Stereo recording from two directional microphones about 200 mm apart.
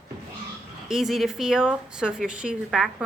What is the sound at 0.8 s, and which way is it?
Speech, centre (ahead or behind).